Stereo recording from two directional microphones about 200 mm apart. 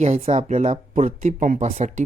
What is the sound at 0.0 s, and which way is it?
Speech, 35° right (ahead or behind).